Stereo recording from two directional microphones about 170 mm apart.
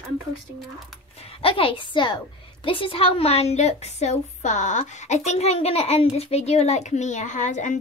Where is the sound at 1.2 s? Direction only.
35° left (ahead or behind).